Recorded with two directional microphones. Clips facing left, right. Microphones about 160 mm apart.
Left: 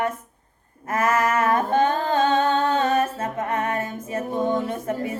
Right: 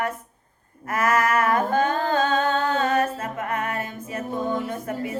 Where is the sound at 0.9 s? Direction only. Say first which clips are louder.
Even; 25° left (ahead or behind).